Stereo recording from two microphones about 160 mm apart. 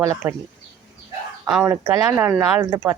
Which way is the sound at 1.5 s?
5° right (ahead or behind).